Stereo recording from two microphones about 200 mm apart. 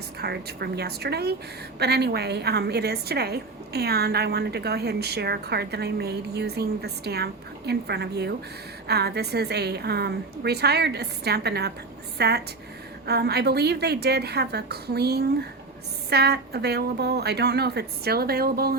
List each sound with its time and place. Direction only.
0.2 s a woman's voice: 55° right (ahead or behind)